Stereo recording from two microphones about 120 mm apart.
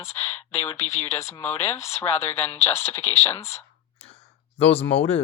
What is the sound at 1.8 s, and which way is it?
Speech, 60° left (ahead or behind).